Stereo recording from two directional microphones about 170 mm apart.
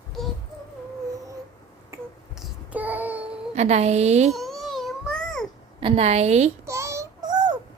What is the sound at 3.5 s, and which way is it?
Speech, 40° right (ahead or behind).